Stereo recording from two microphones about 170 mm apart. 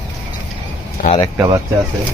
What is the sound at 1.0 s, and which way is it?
Speech, 60° left (ahead or behind).